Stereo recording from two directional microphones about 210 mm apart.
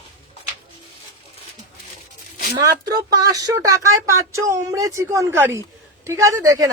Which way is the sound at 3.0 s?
15° right (ahead or behind).